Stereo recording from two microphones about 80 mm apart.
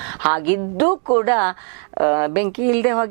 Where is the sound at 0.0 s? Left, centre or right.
Centre.